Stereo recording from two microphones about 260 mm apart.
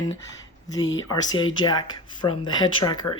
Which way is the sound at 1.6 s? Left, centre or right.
Centre.